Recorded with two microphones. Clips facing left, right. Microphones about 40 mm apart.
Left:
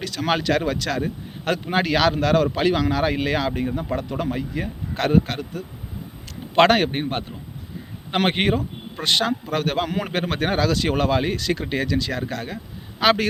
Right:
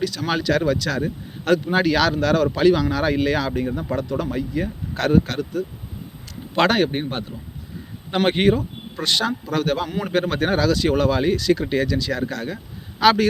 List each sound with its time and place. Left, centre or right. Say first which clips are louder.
0.0 s a man's voice: even; left
6.6 s a man's voice: left 2 dB; left